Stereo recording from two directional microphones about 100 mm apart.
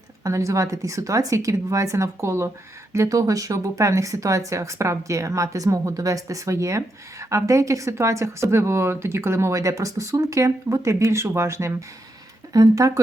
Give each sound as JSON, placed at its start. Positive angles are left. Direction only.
{"t": 0.3, "sound": "speech", "side_deg": -30}